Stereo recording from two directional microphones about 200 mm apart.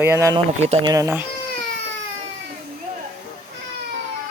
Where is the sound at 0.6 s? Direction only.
35° right (ahead or behind).